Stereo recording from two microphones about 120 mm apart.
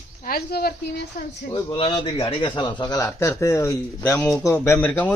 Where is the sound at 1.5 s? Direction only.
35° left (ahead or behind).